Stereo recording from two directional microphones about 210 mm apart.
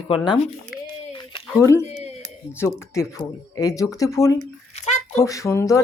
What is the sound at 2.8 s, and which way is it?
Speech, 15° left (ahead or behind).